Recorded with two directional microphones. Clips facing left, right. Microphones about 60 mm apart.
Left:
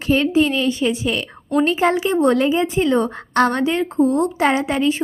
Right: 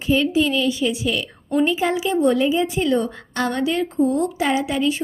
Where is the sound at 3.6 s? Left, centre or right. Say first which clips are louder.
Left 2 dB; left.